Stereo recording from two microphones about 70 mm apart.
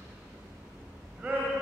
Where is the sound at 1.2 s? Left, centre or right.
Centre.